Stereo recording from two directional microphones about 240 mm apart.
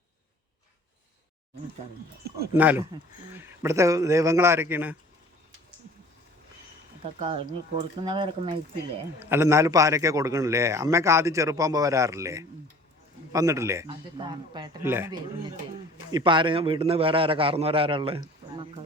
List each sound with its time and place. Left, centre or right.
2.6 s a man's voice: centre
7.0 s a man's voice: right
9.3 s a man's voice: centre